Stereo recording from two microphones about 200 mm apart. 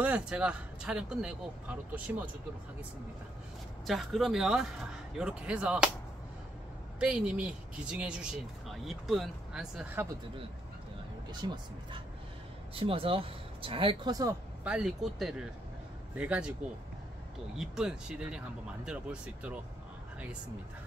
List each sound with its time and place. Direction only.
0.0 s speech: 5° right (ahead or behind)
3.8 s speech: centre (ahead or behind)
7.0 s speech: 5° right (ahead or behind)
11.4 s speech: 20° right (ahead or behind)
14.6 s speech: 5° right (ahead or behind)
17.6 s speech: 5° right (ahead or behind)